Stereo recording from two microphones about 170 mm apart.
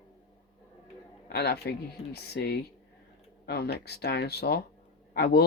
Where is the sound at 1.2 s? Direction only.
75° left (ahead or behind).